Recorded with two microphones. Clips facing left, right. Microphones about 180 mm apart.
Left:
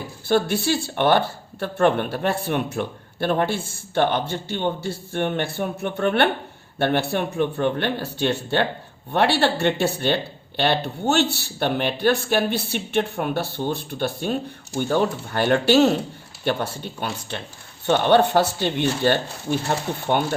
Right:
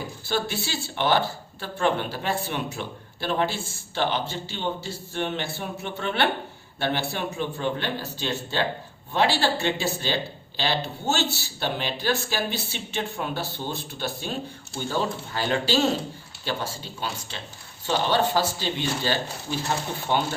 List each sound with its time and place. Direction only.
0.3 s speech: 55° left (ahead or behind)